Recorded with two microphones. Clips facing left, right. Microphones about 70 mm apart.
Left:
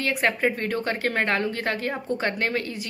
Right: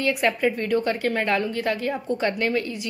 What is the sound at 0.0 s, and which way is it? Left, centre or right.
Speech, left.